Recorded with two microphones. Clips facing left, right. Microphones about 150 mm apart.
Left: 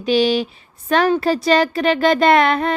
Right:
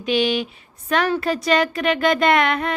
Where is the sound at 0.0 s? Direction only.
35° left (ahead or behind).